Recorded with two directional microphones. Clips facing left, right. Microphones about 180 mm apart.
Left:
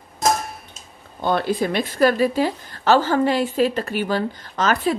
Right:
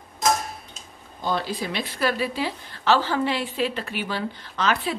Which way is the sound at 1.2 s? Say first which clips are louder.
Left 6 dB; 55° left (ahead or behind).